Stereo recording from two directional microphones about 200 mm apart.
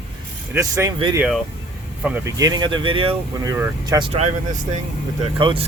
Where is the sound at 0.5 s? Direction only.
15° right (ahead or behind).